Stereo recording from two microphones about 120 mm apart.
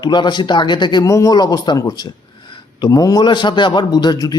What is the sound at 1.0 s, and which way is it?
Speech, 25° left (ahead or behind).